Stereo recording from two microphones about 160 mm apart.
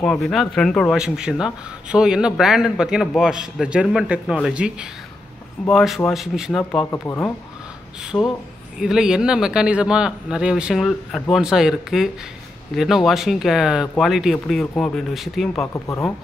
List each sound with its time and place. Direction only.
0.0 s a man's voice: 5° left (ahead or behind)
6.9 s speech: 15° left (ahead or behind)
8.0 s a man's voice: 5° right (ahead or behind)
15.6 s speech: 20° left (ahead or behind)